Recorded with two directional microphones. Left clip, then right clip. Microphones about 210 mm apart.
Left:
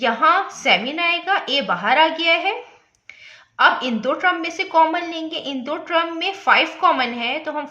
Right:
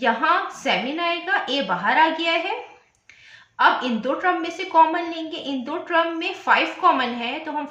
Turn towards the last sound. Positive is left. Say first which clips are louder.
# left 4 dB
turn(degrees=45)  # may be behind; listen again after turning